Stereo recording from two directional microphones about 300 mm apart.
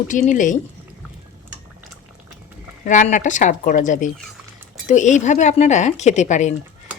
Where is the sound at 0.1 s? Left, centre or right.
Left.